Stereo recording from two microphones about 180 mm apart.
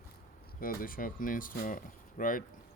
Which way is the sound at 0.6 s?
50° left (ahead or behind).